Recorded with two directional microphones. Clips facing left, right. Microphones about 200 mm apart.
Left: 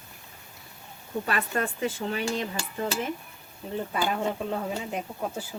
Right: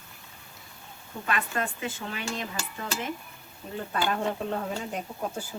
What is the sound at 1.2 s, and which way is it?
Speech, 35° left (ahead or behind).